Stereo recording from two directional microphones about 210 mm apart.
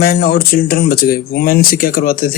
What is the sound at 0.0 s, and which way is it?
Speech, 45° left (ahead or behind).